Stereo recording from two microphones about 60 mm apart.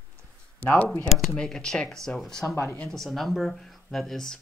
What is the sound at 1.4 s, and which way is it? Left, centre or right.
Speech, centre.